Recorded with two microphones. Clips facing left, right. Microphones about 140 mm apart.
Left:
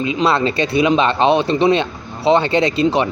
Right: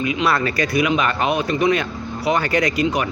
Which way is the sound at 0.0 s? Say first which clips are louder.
Left 3 dB; 25° left (ahead or behind).